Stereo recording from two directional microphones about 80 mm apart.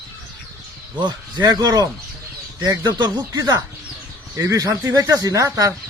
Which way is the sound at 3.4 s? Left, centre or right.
Right.